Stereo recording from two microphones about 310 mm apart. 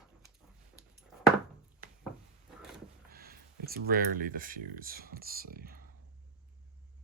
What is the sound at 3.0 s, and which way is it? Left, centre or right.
Speech, right.